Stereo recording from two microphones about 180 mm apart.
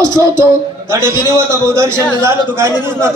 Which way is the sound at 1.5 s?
15° right (ahead or behind).